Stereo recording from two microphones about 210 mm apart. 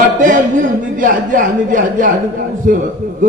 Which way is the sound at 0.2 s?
40° right (ahead or behind).